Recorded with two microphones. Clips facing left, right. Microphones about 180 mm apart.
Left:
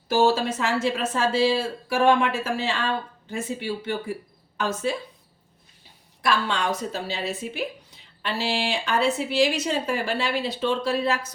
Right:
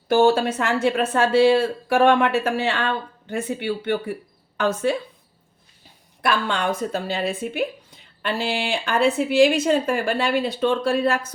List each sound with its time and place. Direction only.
0.1 s a woman's voice: 60° right (ahead or behind)
6.2 s a woman's voice: 55° right (ahead or behind)